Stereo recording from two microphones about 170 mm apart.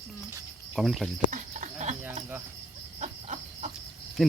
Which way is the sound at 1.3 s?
45° right (ahead or behind).